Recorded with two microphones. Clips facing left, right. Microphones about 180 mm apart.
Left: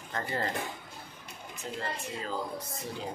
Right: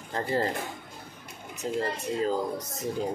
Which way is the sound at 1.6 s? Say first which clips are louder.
Right 7 dB; 40° right (ahead or behind).